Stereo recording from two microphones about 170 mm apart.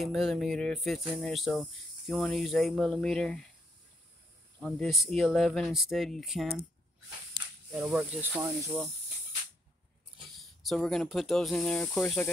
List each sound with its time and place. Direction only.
0.0 s speech: centre (ahead or behind)
4.7 s speech: centre (ahead or behind)
7.7 s speech: 5° right (ahead or behind)
10.1 s speech: centre (ahead or behind)